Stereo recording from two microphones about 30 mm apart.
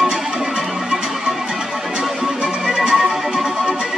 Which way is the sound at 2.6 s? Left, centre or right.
Centre.